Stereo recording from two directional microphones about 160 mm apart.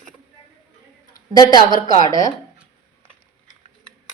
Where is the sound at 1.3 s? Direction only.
25° left (ahead or behind).